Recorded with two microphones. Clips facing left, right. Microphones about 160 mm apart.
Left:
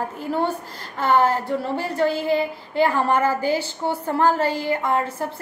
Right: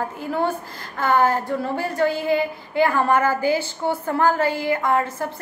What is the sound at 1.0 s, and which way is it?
A woman's voice, 30° left (ahead or behind).